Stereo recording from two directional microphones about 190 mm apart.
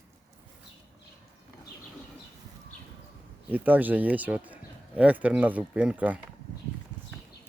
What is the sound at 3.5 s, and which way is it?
Speech, 10° right (ahead or behind).